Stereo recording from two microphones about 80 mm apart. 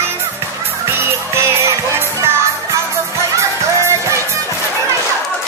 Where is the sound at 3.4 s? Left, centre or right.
Right.